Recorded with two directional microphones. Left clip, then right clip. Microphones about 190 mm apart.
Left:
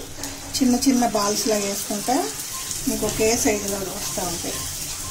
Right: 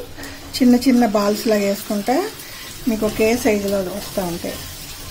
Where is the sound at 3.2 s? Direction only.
45° right (ahead or behind).